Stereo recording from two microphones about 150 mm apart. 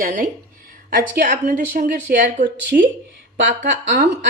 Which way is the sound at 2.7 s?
80° right.